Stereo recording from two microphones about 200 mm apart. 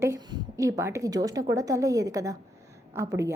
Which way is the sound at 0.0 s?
15° right (ahead or behind).